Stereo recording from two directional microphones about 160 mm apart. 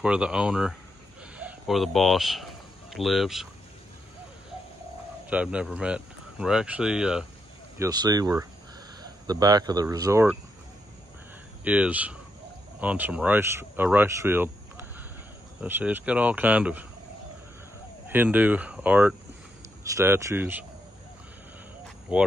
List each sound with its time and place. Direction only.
0.0 s speech: 5° right (ahead or behind)
5.3 s speech: 5° right (ahead or behind)
7.8 s speech: 25° right (ahead or behind)
11.6 s speech: 10° right (ahead or behind)
15.6 s speech: 10° right (ahead or behind)
18.1 s speech: 10° right (ahead or behind)
22.1 s speech: 10° right (ahead or behind)